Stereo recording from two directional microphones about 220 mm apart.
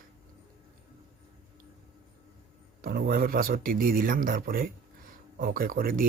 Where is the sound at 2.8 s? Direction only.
40° right (ahead or behind).